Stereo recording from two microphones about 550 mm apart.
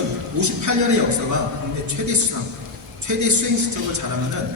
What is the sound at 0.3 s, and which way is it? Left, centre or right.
A woman's voice, right.